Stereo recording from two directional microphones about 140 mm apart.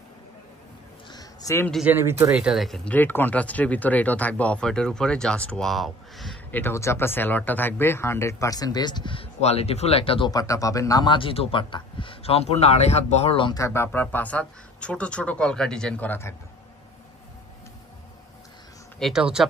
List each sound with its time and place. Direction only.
1.1 s a sound: 20° left (ahead or behind)
1.9 s speech: 15° right (ahead or behind)
2.3 s speech: 5° right (ahead or behind)
6.5 s speech: 15° left (ahead or behind); by 10.3 s 40° left (ahead or behind)
10.3 s speech: 25° left (ahead or behind); by 13.5 s 50° left (ahead or behind)
13.5 s speech: 20° left (ahead or behind)
18.9 s speech: centre (ahead or behind)